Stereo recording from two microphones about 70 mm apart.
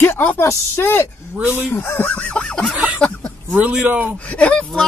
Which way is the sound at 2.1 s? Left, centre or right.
Centre.